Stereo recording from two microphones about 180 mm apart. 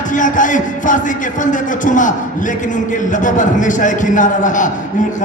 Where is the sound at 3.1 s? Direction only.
45° left (ahead or behind).